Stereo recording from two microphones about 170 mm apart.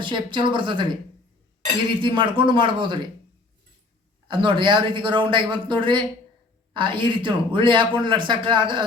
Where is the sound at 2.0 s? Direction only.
30° right (ahead or behind).